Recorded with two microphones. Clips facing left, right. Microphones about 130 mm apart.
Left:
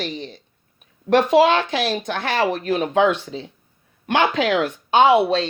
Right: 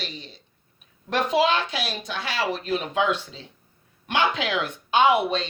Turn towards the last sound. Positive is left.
turn(degrees=40)  # may be behind; listen again after turning